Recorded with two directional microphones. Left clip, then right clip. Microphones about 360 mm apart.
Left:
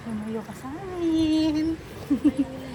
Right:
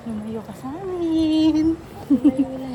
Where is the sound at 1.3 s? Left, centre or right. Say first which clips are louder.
Right 5 dB; centre.